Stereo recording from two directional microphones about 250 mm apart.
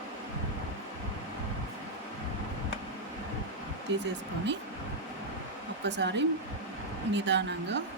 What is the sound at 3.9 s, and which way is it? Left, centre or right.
Speech, right.